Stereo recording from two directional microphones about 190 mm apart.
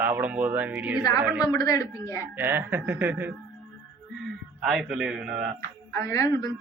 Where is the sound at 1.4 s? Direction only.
20° left (ahead or behind).